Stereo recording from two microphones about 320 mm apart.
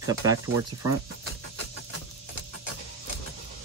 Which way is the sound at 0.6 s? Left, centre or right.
Right.